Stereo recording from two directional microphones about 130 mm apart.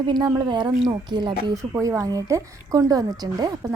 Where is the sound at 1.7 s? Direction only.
20° right (ahead or behind).